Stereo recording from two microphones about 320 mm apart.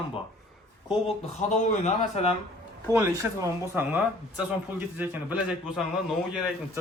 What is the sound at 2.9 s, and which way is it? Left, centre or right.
Speech, centre.